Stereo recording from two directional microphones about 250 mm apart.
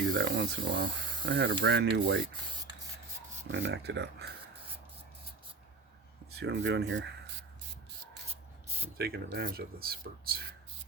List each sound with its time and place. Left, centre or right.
0.2 s speech: right
3.5 s speech: right
6.3 s speech: right
8.3 s rub: right
9.0 s speech: right